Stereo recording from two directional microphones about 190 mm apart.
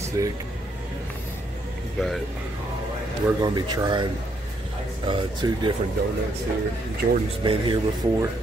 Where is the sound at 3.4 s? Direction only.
20° right (ahead or behind).